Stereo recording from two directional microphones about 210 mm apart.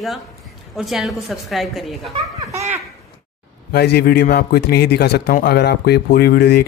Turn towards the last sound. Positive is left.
turn(degrees=50)  # may be behind; listen again after turning